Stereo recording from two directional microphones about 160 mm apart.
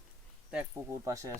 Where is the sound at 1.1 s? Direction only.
20° right (ahead or behind).